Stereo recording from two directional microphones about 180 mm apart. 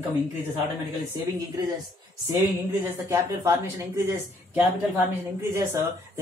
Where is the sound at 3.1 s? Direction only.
15° right (ahead or behind).